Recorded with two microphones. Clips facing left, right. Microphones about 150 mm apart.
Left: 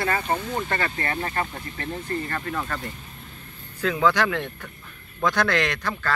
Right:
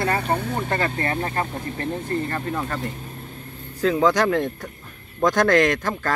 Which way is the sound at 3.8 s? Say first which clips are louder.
Right 3 dB; 35° right (ahead or behind).